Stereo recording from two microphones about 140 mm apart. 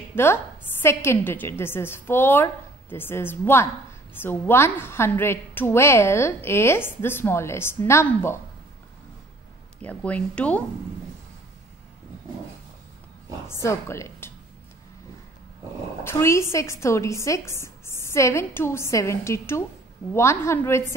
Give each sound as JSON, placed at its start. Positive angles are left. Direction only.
{"t": 0.1, "sound": "a woman's voice", "side_deg": 15}
{"t": 9.8, "sound": "a woman's voice", "side_deg": 10}
{"t": 13.5, "sound": "a woman's voice", "side_deg": 20}
{"t": 16.0, "sound": "a woman's voice", "side_deg": 20}